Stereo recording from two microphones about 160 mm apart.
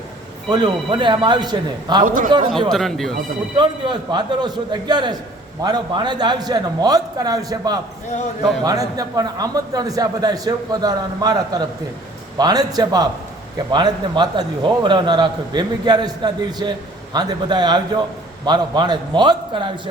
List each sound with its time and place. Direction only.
0.5 s a man's voice: 30° right (ahead or behind)
2.0 s a man's voice: 55° right (ahead or behind)
2.5 s speech: centre (ahead or behind)
3.5 s a man's voice: 30° right (ahead or behind)